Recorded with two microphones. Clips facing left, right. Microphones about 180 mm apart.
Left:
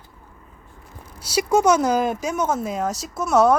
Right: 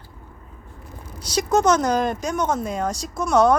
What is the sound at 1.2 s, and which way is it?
Speech, 10° left (ahead or behind).